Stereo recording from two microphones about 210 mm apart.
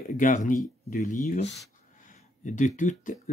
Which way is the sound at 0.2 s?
40° left (ahead or behind).